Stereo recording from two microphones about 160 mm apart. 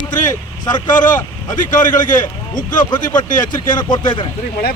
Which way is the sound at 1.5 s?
55° left (ahead or behind).